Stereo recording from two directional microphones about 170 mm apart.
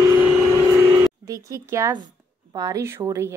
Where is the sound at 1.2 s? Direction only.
20° right (ahead or behind).